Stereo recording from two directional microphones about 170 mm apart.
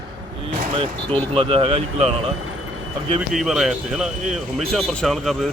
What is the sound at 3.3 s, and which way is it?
Speech, centre (ahead or behind).